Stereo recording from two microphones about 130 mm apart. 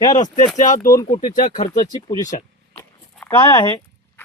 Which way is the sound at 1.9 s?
30° left (ahead or behind).